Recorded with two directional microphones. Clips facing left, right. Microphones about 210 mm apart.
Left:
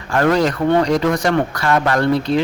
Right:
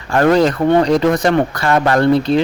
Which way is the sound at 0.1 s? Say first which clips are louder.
Right 3 dB; 25° right (ahead or behind).